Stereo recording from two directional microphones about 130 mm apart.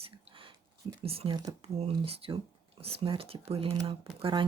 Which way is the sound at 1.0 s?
50° right (ahead or behind).